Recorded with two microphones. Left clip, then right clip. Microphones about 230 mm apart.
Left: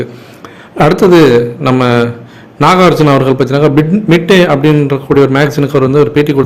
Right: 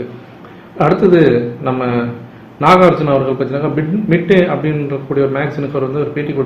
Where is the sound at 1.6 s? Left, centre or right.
Left.